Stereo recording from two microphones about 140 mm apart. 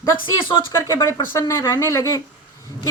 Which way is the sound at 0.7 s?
20° left (ahead or behind).